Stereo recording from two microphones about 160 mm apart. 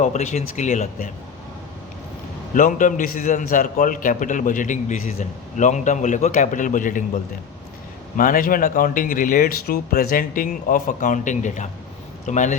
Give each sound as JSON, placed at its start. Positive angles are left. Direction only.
{"t": 0.0, "sound": "a man's voice", "side_deg": 50}
{"t": 2.6, "sound": "a man's voice", "side_deg": 55}
{"t": 8.1, "sound": "a man's voice", "side_deg": 60}